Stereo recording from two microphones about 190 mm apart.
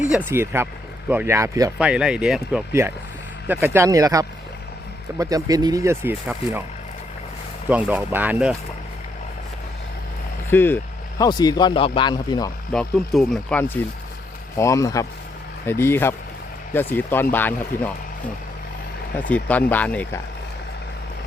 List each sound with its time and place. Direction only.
0.3 s speech: 15° right (ahead or behind)
1.8 s speech: 5° right (ahead or behind)
7.7 s speech: 10° right (ahead or behind)
10.5 s speech: 10° left (ahead or behind)
12.7 s speech: 5° left (ahead or behind)
19.3 s speech: 10° left (ahead or behind)